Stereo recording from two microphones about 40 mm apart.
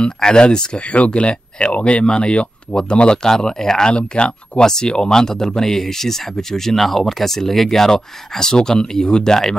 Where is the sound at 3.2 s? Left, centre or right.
Centre.